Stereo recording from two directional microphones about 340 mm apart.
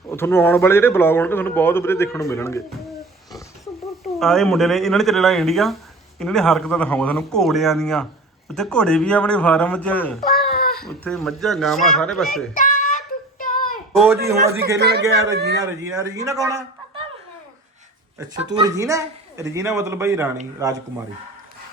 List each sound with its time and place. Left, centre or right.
0.1 s a man's voice: centre
3.8 s speech: centre
10.2 s babbling: centre
10.5 s babbling: left
11.0 s speech: centre
12.5 s child singing: left
13.9 s speech: centre
14.8 s a man's voice: right
15.6 s a man's voice: centre
18.2 s a man's voice: centre